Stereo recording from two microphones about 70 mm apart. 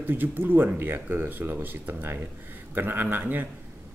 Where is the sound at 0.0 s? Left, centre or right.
Right.